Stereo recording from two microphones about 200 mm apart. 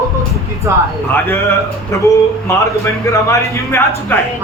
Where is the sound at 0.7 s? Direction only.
15° right (ahead or behind).